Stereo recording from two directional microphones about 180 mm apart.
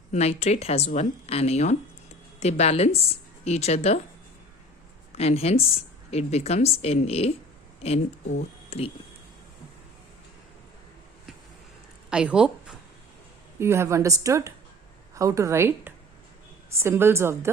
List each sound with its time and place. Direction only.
0.1 s a woman's voice: 35° left (ahead or behind)
5.1 s a woman's voice: 35° left (ahead or behind)
12.1 s a woman's voice: 5° right (ahead or behind)